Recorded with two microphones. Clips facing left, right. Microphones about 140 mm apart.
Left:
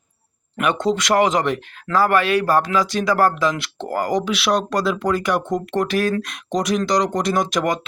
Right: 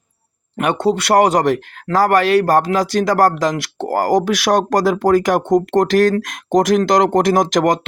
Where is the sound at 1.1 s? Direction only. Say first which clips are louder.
Right 5 dB; 40° right (ahead or behind).